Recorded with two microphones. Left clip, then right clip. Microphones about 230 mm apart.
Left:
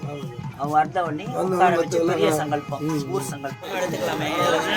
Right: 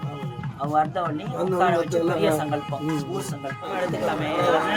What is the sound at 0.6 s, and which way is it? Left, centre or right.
Speech, left.